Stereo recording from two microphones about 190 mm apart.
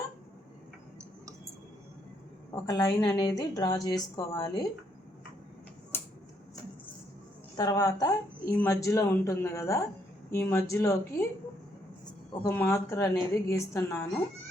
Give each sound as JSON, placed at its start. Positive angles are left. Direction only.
{"t": 2.6, "sound": "a woman's voice", "side_deg": 20}
{"t": 7.5, "sound": "a woman's voice", "side_deg": 20}
{"t": 12.3, "sound": "a woman's voice", "side_deg": 15}